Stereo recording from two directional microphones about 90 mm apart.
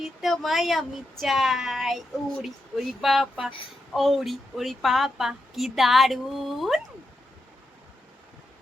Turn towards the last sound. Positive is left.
turn(degrees=0)  # may be behind; listen again after turning